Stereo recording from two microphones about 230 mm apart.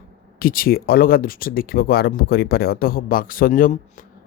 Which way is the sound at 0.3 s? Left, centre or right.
Left.